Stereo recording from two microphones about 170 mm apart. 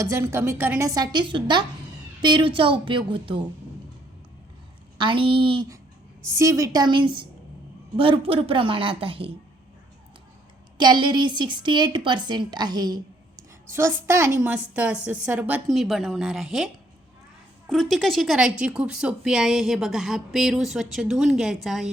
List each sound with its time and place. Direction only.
0.0 s a woman's voice: 15° right (ahead or behind)
4.9 s a woman's voice: 30° right (ahead or behind)
6.3 s a woman's voice: 15° right (ahead or behind); by 9.3 s 35° right (ahead or behind)
10.8 s a woman's voice: 25° right (ahead or behind)
13.7 s a woman's voice: 15° right (ahead or behind)
17.7 s speech: centre (ahead or behind)